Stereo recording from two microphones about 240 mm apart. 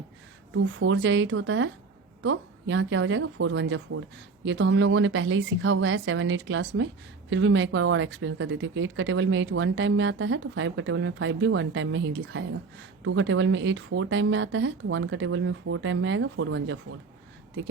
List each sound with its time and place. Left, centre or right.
0.5 s speech: right